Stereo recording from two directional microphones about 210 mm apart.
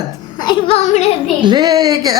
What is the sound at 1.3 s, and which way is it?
Speech, 20° right (ahead or behind).